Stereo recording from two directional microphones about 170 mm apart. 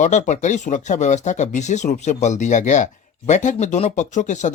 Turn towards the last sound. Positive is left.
turn(degrees=45)  # may be behind; listen again after turning